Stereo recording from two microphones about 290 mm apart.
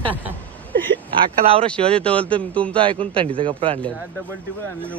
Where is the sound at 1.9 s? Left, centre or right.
Centre.